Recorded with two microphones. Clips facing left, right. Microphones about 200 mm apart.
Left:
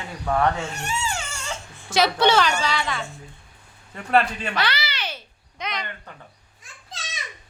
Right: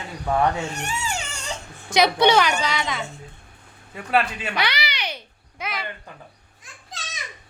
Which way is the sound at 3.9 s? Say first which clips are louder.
Left 2 dB; 10° right (ahead or behind).